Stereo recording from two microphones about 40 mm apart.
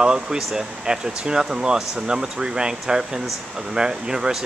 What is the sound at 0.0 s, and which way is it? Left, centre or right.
A man's voice, centre.